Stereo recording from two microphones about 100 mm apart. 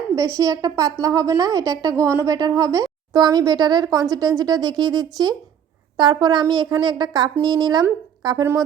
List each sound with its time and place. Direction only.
0.3 s speech: 35° right (ahead or behind)